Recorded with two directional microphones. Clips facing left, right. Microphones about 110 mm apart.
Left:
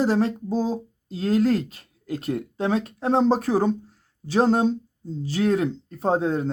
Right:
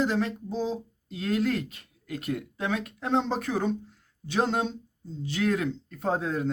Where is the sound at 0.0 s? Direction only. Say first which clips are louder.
Left 5 dB; 35° left (ahead or behind).